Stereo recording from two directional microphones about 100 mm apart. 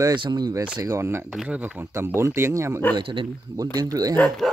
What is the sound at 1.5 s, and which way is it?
Speech, 15° right (ahead or behind).